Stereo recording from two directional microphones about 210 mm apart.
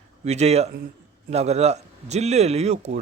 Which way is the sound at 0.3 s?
30° right (ahead or behind).